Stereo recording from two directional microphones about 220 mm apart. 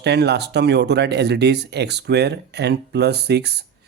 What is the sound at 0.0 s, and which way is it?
Speech, 50° right (ahead or behind).